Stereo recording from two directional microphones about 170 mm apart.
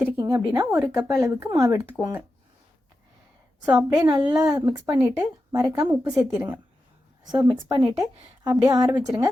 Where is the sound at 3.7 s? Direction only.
20° right (ahead or behind).